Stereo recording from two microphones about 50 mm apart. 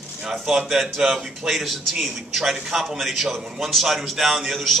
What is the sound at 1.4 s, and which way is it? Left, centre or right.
A man's voice, centre.